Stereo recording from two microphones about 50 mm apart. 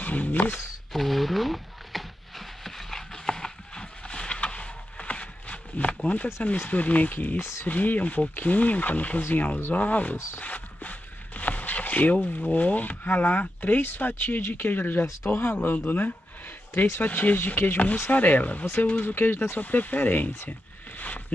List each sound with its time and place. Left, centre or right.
0.0 s speech: left
0.9 s a sound: centre; by 5.9 s left
6.4 s speech: left
7.3 s speech: left
7.6 s speech: left
10.3 s a sound: left
12.4 s speech: left
17.7 s speech: left